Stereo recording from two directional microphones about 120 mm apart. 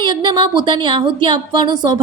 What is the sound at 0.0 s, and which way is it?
A woman's voice, 40° right (ahead or behind).